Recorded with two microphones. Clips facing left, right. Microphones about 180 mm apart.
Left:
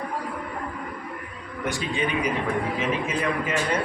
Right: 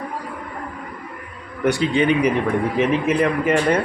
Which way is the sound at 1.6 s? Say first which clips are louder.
Right 10 dB; 65° right (ahead or behind).